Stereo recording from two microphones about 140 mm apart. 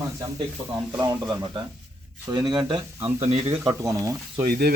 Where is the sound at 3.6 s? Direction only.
25° right (ahead or behind).